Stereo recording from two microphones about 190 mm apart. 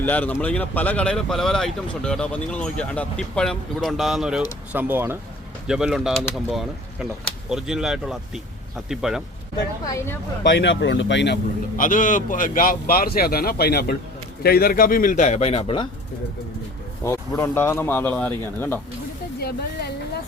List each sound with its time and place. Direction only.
0.0 s speech: 10° left (ahead or behind)
9.8 s speech: 15° left (ahead or behind)
10.5 s speech: 65° left (ahead or behind)
11.8 s a man's voice: 45° left (ahead or behind); by 15.9 s 30° left (ahead or behind)
17.0 s speech: 15° left (ahead or behind)
19.4 s speech: 55° left (ahead or behind)